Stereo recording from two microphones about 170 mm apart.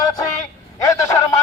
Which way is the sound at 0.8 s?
20° left (ahead or behind).